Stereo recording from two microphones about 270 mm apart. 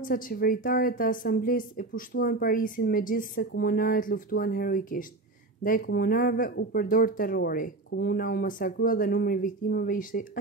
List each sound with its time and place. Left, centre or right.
0.0 s speech: left